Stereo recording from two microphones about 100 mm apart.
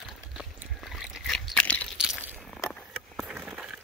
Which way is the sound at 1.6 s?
15° left (ahead or behind).